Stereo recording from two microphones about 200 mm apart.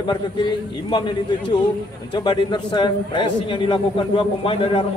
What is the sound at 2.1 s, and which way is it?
A man's voice, 20° left (ahead or behind).